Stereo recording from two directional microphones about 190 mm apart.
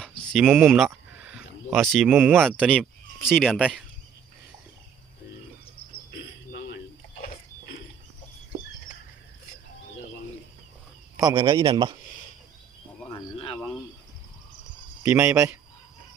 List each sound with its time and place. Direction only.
0.3 s speech: 5° right (ahead or behind)
0.9 s a sound: 5° right (ahead or behind); by 3.3 s 10° left (ahead or behind)
3.3 s speech: centre (ahead or behind)
5.7 s cricket: 65° left (ahead or behind)
11.2 s a man's voice: 20° right (ahead or behind)
13.1 s insect: 25° left (ahead or behind)
15.0 s speech: 10° right (ahead or behind)